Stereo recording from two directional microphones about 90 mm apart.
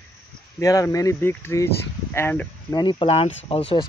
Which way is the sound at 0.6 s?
40° left (ahead or behind).